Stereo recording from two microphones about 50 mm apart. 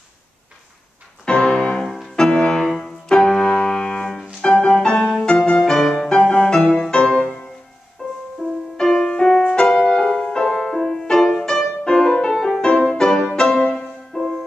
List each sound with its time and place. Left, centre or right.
1.2 s music: centre
2.5 s piano: centre
4.4 s music: centre
8.7 s music: centre